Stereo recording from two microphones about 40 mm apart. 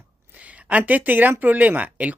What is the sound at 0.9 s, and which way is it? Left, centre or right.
Speech, right.